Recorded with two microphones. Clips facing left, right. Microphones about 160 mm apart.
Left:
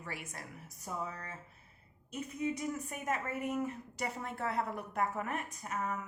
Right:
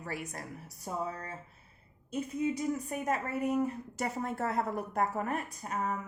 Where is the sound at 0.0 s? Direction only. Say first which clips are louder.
Right 5 dB; 40° right (ahead or behind).